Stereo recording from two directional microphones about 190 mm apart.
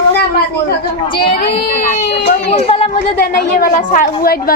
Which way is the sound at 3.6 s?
50° left (ahead or behind).